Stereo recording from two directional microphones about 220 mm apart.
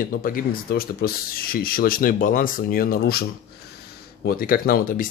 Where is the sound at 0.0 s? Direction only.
40° left (ahead or behind).